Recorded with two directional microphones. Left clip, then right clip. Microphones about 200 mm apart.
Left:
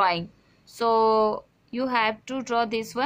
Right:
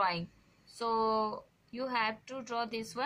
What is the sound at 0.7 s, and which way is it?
A woman's voice, 55° left (ahead or behind).